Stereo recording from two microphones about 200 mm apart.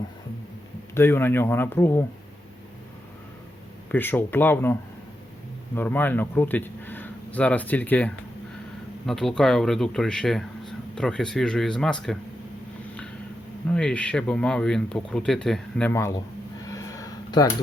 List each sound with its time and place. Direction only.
0.9 s speech: 10° left (ahead or behind)
3.9 s speech: 10° left (ahead or behind)
13.7 s speech: 5° left (ahead or behind)
15.9 s speech: 15° left (ahead or behind)
16.6 s a sound: 15° left (ahead or behind)